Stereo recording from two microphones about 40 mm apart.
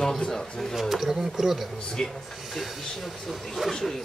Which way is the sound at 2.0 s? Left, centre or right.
Centre.